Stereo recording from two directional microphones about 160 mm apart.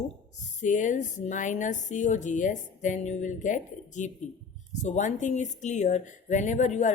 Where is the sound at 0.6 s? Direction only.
50° left (ahead or behind).